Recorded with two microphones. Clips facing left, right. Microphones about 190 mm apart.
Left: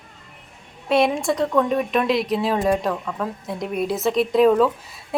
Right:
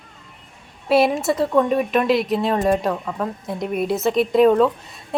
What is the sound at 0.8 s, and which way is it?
Speech, 5° right (ahead or behind).